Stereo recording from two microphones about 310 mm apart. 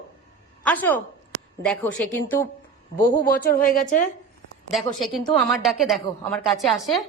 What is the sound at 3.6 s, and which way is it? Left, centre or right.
Speech, left.